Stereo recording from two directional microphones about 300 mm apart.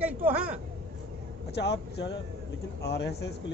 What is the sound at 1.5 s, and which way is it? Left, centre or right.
Speech, left.